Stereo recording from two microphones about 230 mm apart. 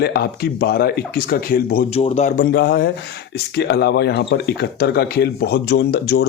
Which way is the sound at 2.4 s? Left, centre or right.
Left.